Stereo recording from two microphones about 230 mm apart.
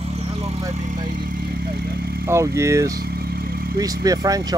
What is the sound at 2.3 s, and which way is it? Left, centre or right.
Speech, centre.